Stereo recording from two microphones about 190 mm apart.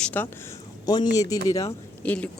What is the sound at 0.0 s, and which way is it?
Speech, 10° left (ahead or behind).